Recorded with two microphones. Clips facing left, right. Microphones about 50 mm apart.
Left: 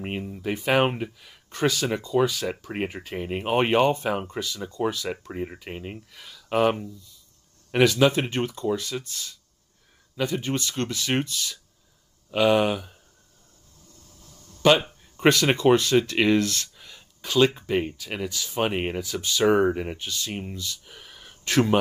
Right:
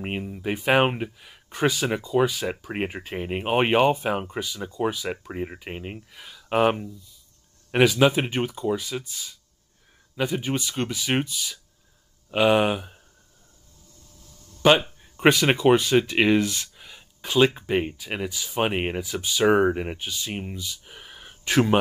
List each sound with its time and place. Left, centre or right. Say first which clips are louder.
0.0 s speech: right 1 dB; centre
14.6 s speech: right 1 dB; centre